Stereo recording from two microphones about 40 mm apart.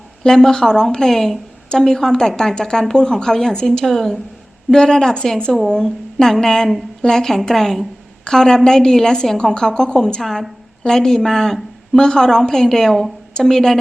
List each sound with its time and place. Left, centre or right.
0.2 s speech: centre